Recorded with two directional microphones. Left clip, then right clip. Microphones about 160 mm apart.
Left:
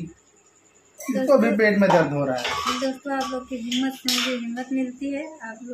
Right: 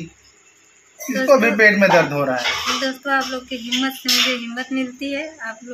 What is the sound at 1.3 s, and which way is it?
Speech, 5° right (ahead or behind).